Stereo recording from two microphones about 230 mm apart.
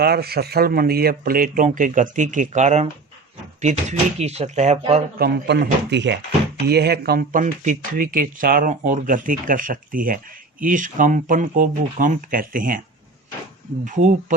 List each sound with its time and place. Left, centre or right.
0.0 s speech: right
5.2 s speech: right
13.8 s speech: right